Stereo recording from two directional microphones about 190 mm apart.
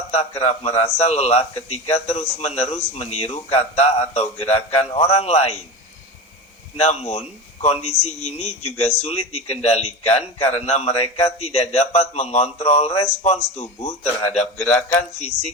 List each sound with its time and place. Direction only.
0.1 s speech: 35° left (ahead or behind)
6.7 s speech: 35° left (ahead or behind)
14.6 s a man's voice: 5° left (ahead or behind)